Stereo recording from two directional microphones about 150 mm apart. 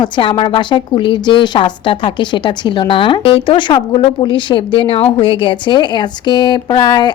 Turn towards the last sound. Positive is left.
turn(degrees=25)  # may be behind; listen again after turning